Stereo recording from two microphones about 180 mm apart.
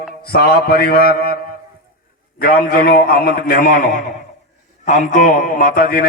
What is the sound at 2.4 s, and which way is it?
A man's voice, 55° left (ahead or behind).